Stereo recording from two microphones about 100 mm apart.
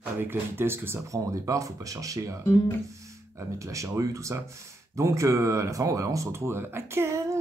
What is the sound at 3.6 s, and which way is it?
Speech, 30° right (ahead or behind).